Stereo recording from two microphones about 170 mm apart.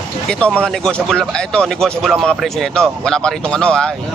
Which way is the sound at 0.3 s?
5° left (ahead or behind).